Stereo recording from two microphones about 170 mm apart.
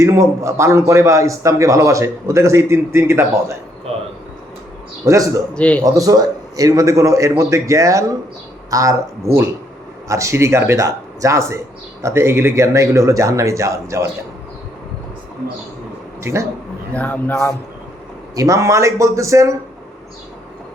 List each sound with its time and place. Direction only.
0.0 s a man's voice: 15° right (ahead or behind)
5.0 s a man's voice: 20° right (ahead or behind)
5.5 s a man's voice: 5° left (ahead or behind)
5.8 s a man's voice: 20° right (ahead or behind)
16.2 s a man's voice: 15° right (ahead or behind)
16.9 s a man's voice: 10° left (ahead or behind)
18.3 s a man's voice: 20° right (ahead or behind)